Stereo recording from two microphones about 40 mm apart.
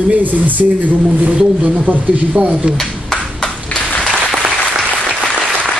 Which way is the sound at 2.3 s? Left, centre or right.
Right.